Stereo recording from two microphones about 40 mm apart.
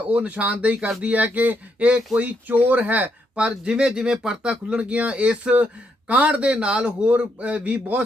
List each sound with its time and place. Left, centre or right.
0.1 s a man's voice: right
3.3 s a man's voice: right